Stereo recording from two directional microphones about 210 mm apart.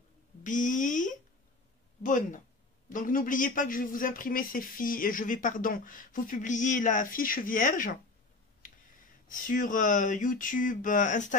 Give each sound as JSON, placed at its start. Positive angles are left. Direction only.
{"t": 0.4, "sound": "speech", "side_deg": 35}
{"t": 9.3, "sound": "speech", "side_deg": 40}